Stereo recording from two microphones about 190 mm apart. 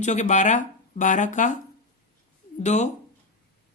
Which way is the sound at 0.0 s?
40° left (ahead or behind).